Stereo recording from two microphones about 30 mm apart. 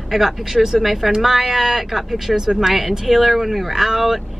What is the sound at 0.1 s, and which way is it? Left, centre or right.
Speech, centre.